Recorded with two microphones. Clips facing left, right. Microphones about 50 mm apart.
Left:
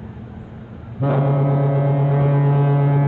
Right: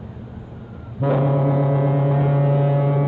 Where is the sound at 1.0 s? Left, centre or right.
Centre.